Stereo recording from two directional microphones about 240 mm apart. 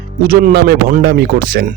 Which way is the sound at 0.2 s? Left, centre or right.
Right.